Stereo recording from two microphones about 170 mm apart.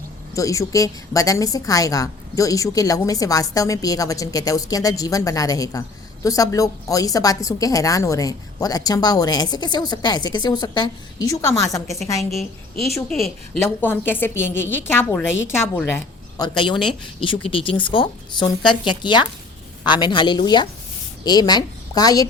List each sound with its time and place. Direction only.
0.3 s a woman's voice: 20° left (ahead or behind)
13.1 s a woman's voice: 5° left (ahead or behind)
16.4 s a woman's voice: 30° left (ahead or behind)